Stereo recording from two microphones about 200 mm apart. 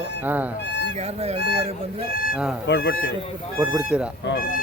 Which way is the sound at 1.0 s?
30° right (ahead or behind).